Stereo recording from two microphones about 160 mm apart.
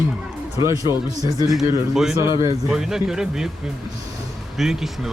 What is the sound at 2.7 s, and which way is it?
Speech, 5° right (ahead or behind).